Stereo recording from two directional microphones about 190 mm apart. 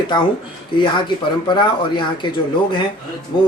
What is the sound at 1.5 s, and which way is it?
Speech, 25° left (ahead or behind).